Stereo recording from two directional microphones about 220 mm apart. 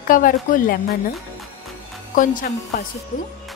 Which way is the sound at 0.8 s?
Centre (ahead or behind).